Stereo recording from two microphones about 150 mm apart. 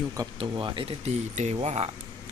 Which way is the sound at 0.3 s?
35° right (ahead or behind).